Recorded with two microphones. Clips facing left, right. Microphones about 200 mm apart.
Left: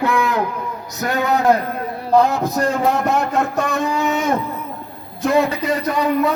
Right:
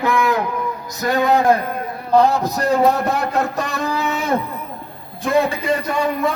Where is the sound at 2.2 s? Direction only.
35° right (ahead or behind).